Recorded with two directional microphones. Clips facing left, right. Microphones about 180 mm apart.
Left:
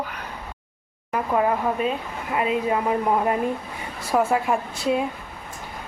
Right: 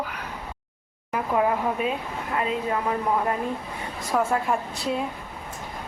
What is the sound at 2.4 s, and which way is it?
A woman's voice, 15° left (ahead or behind).